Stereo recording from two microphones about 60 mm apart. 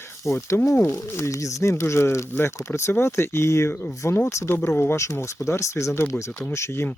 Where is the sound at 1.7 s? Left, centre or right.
Left.